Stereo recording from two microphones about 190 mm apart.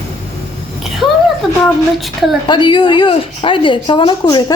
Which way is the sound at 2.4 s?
25° left (ahead or behind).